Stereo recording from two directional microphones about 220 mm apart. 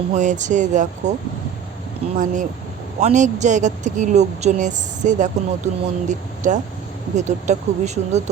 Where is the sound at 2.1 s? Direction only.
35° right (ahead or behind).